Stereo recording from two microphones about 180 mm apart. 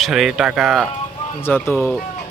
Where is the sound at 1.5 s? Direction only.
10° left (ahead or behind).